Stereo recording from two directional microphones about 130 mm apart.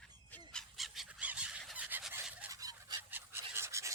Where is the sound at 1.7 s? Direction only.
10° right (ahead or behind).